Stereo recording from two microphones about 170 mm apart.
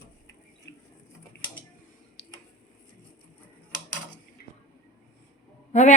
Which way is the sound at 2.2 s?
90° left.